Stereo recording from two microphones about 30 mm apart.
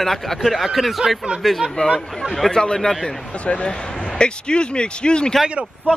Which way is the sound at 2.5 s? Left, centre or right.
Left.